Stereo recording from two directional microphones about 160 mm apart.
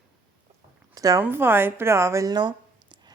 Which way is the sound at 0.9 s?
20° right (ahead or behind).